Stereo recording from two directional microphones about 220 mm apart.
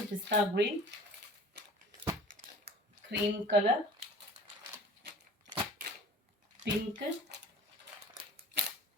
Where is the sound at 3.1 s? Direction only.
50° right (ahead or behind).